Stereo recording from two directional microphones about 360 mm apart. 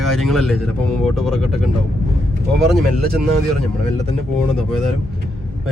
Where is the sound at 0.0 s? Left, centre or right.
Centre.